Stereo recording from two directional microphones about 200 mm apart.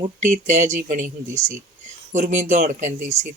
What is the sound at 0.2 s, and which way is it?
Speech, 40° right (ahead or behind).